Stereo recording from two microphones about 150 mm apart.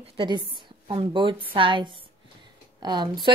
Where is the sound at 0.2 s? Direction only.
30° right (ahead or behind).